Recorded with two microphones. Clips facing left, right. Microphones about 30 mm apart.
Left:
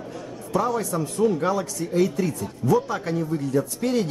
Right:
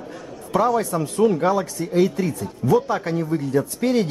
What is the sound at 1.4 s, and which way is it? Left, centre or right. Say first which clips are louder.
Speech: right 4 dB; centre.